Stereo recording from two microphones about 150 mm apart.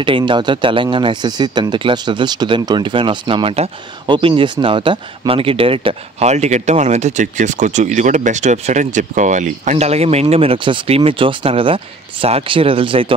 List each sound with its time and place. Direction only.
0.0 s speech: 35° right (ahead or behind)